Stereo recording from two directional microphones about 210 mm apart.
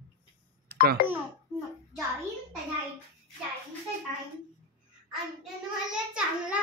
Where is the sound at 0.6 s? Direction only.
50° right (ahead or behind).